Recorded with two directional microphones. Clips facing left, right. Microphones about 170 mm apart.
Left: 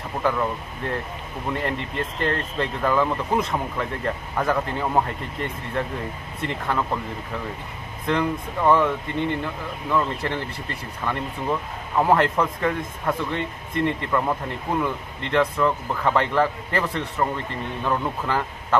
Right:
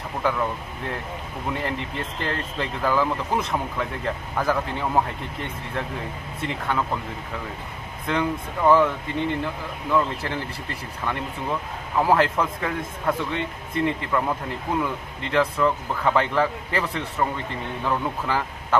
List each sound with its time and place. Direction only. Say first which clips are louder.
1.5 s speech: left 2 dB; centre (ahead or behind)
8.1 s speech: left 1 dB; centre (ahead or behind)